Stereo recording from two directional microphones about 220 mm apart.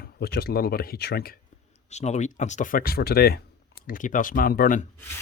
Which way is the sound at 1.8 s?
30° left (ahead or behind).